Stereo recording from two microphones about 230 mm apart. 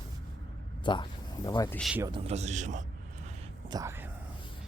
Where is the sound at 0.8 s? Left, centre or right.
Centre.